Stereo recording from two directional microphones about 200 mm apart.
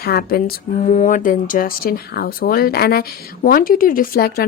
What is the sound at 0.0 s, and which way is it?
A woman's voice, 50° left (ahead or behind).